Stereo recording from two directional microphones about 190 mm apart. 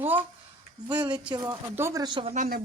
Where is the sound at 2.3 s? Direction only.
40° right (ahead or behind).